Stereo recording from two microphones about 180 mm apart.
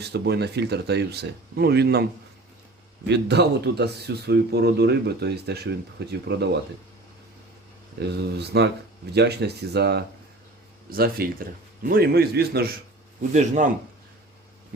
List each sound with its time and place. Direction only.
0.0 s speech: 65° right (ahead or behind)
3.1 s speech: 70° right (ahead or behind)
7.9 s speech: 65° right (ahead or behind)
10.9 s speech: 55° right (ahead or behind)
13.3 s a man's voice: 40° right (ahead or behind)
14.7 s speech: 60° right (ahead or behind)